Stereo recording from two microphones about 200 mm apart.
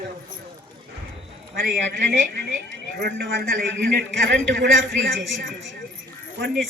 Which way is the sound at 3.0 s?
50° right (ahead or behind).